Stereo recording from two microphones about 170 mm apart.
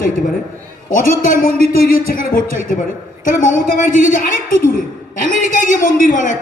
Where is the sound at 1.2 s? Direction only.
55° left (ahead or behind).